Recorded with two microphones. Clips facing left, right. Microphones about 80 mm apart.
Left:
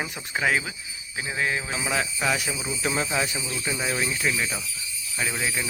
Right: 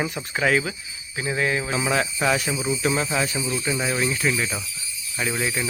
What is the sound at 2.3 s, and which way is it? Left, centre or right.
Speech, centre.